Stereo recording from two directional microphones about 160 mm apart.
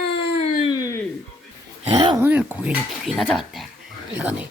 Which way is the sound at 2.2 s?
10° right (ahead or behind).